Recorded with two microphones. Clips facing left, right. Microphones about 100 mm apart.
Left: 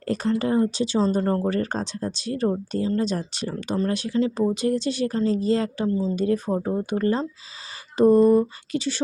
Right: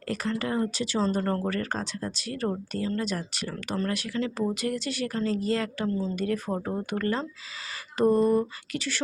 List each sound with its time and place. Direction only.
0.0 s speech: 30° left (ahead or behind)